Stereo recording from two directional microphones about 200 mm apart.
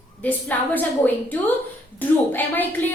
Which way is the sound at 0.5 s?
10° left (ahead or behind).